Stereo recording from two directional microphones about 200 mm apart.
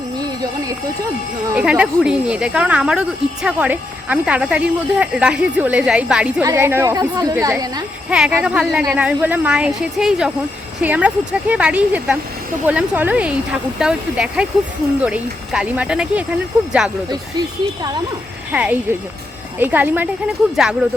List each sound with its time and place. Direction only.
1.5 s a woman's voice: 5° right (ahead or behind)
8.3 s a woman's voice: 5° right (ahead or behind)
18.5 s a woman's voice: 5° right (ahead or behind)